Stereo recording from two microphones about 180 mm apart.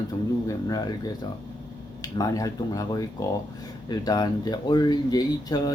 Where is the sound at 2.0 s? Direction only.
20° left (ahead or behind).